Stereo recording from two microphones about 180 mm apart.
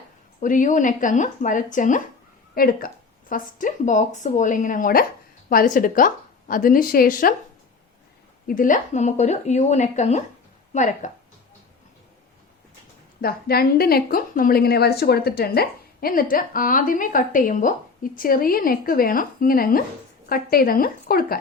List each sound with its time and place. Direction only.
0.3 s a woman's voice: 45° left (ahead or behind)
8.4 s a woman's voice: 50° left (ahead or behind)
13.2 s a woman's voice: 55° left (ahead or behind)